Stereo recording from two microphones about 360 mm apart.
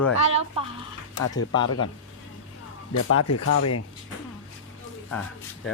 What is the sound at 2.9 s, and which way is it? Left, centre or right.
Speech, left.